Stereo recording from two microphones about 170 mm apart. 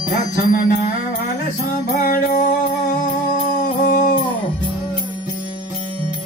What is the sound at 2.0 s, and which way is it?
Music, 55° left (ahead or behind).